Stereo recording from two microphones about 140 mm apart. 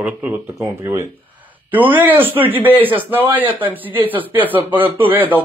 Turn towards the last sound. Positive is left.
turn(degrees=-15)  # may be behind; listen again after turning